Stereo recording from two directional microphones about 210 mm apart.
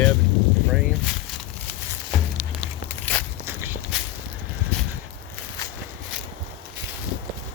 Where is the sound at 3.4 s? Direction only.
10° right (ahead or behind).